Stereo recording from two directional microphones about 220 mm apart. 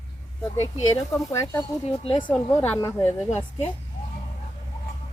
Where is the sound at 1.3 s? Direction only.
10° left (ahead or behind).